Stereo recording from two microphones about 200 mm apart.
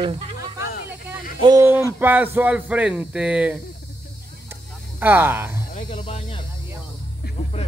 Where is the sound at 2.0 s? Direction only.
10° right (ahead or behind).